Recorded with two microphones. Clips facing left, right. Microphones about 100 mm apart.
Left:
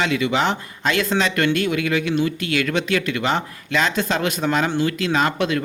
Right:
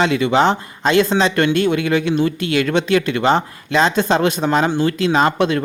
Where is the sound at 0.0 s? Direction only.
30° right (ahead or behind).